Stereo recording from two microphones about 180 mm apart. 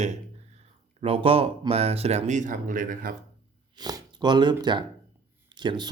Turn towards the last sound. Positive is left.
turn(degrees=-25)  # may be behind; listen again after turning